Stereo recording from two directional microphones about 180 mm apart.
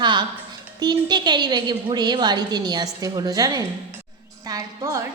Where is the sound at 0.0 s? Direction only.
25° right (ahead or behind).